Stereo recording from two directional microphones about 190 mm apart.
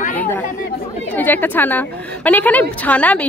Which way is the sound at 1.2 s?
10° left (ahead or behind).